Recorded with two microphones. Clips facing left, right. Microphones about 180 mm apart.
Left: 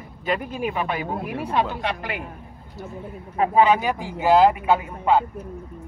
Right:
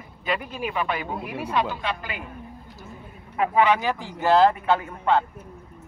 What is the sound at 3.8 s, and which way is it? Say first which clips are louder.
Speech: left 2 dB; 10° left (ahead or behind).